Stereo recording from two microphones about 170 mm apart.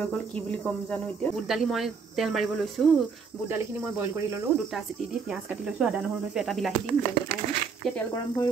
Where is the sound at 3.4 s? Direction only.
15° right (ahead or behind).